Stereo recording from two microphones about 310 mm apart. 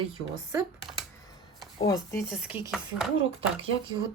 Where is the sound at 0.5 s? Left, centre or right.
Centre.